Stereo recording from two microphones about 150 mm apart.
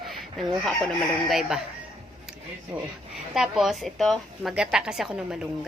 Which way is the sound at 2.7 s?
10° right (ahead or behind).